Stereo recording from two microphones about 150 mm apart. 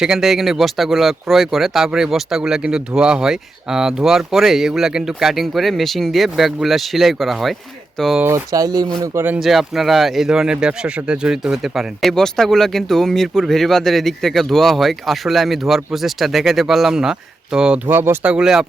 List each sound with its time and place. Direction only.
0.0 s speech: 5° right (ahead or behind)
8.2 s speech: 20° right (ahead or behind)
9.0 s speech: 15° right (ahead or behind)
9.4 s speech: centre (ahead or behind)